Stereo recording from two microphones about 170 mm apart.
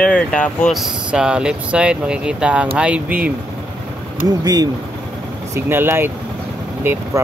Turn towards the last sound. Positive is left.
turn(degrees=-15)  # may be behind; listen again after turning